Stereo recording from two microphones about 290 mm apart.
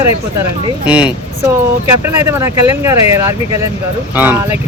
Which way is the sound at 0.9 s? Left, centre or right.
Centre.